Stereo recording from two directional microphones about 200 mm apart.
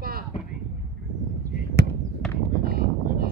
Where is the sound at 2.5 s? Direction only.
50° right (ahead or behind).